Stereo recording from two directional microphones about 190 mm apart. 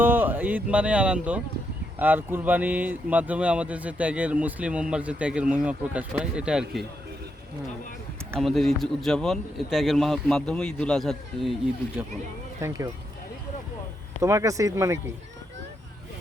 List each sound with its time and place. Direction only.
0.0 s speech: 10° right (ahead or behind)
8.4 s speech: centre (ahead or behind)
12.6 s speech: 15° right (ahead or behind)
14.2 s speech: 15° right (ahead or behind)